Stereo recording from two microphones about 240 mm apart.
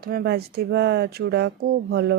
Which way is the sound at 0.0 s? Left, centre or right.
Right.